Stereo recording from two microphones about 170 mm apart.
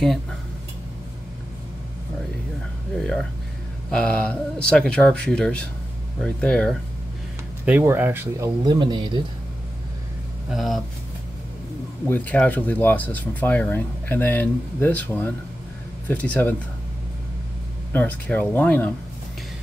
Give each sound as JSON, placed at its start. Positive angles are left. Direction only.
{"t": 0.0, "sound": "speech", "side_deg": 5}
{"t": 3.9, "sound": "speech", "side_deg": 5}
{"t": 7.6, "sound": "speech", "side_deg": -10}
{"t": 8.6, "sound": "speech", "side_deg": -25}
{"t": 10.5, "sound": "speech", "side_deg": 0}
{"t": 12.1, "sound": "speech", "side_deg": 10}
{"t": 17.9, "sound": "speech", "side_deg": 10}